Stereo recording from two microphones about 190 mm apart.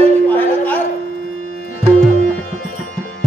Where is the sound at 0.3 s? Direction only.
10° left (ahead or behind).